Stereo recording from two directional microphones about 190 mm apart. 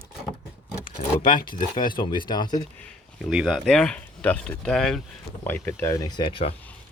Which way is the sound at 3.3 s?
5° right (ahead or behind).